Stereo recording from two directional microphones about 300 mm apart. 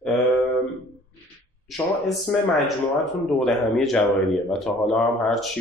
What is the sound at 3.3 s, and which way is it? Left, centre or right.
A man's voice, centre.